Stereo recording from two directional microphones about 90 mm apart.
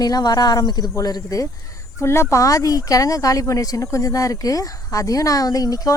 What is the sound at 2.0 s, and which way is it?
Speech, 30° left (ahead or behind).